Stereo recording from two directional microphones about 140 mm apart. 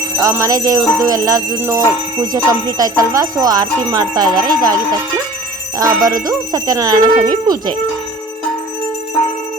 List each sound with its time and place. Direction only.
0.2 s bell: 20° right (ahead or behind)